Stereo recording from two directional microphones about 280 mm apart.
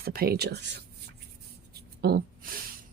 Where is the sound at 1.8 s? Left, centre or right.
Right.